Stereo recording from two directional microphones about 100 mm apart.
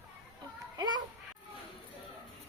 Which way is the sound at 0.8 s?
45° right (ahead or behind).